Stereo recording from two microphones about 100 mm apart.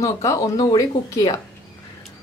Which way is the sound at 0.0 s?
30° left (ahead or behind).